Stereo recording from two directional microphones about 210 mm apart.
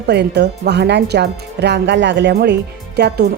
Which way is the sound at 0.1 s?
50° right (ahead or behind).